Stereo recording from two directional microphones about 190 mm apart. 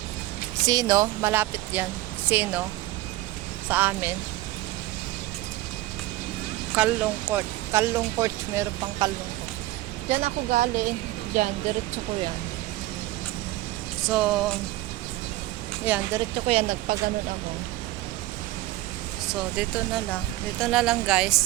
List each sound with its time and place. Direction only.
0.6 s speech: 20° right (ahead or behind)
3.7 s speech: 10° right (ahead or behind)
6.7 s speech: 5° right (ahead or behind)
10.1 s speech: 35° right (ahead or behind)
14.0 s speech: 5° right (ahead or behind)
15.8 s speech: 10° right (ahead or behind)
16.5 s speech: 35° right (ahead or behind)
19.3 s speech: centre (ahead or behind)